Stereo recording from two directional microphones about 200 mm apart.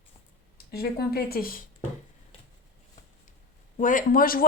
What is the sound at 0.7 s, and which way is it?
Speech, 50° left (ahead or behind).